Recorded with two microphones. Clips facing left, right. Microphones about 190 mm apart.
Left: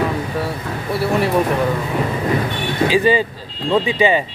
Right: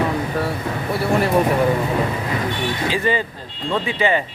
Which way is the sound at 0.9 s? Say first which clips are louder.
Left 1 dB; centre (ahead or behind).